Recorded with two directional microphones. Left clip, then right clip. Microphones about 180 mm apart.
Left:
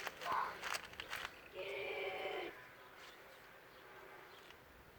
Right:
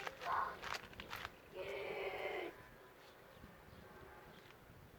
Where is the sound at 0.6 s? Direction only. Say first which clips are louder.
Left 3 dB; 70° left (ahead or behind).